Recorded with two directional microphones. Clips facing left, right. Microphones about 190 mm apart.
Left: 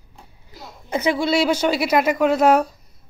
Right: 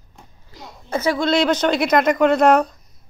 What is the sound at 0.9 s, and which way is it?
Speech, 15° left (ahead or behind).